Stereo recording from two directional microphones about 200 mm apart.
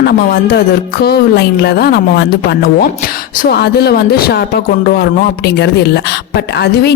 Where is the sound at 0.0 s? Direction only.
55° left (ahead or behind).